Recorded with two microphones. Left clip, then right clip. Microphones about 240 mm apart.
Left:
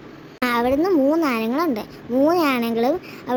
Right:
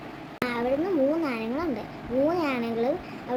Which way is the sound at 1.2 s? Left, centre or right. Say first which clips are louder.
Left 8 dB; left.